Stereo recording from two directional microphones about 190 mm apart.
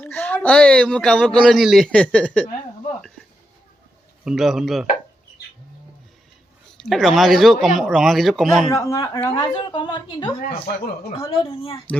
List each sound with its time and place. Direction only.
0.0 s a man's voice: 10° left (ahead or behind)
4.2 s a man's voice: 5° right (ahead or behind)
6.7 s a man's voice: centre (ahead or behind)
8.7 s a woman's voice: 20° left (ahead or behind)